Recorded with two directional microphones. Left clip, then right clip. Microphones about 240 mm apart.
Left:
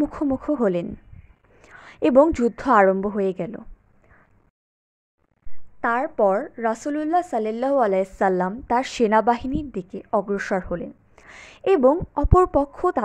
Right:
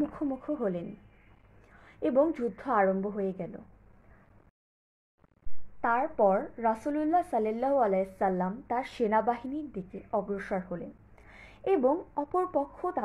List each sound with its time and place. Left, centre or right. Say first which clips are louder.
0.1 s a woman's voice: left 10 dB; left
5.8 s a woman's voice: left 6 dB; left